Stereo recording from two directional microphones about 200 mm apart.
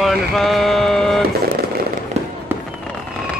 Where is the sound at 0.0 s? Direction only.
Centre (ahead or behind).